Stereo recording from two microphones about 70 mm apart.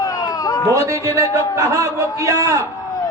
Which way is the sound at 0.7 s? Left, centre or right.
Right.